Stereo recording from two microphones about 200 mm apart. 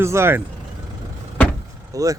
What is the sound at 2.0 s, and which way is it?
Speech, 15° right (ahead or behind).